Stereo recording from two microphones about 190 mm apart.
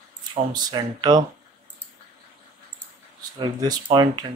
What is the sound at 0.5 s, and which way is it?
Speech, 20° right (ahead or behind).